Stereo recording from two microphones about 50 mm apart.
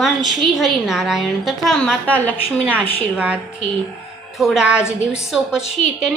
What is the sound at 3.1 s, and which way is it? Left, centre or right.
Speech, right.